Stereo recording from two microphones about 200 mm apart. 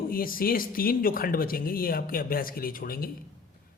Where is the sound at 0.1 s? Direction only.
45° left (ahead or behind).